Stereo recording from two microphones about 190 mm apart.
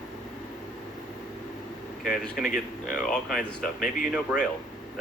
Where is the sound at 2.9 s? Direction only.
5° left (ahead or behind).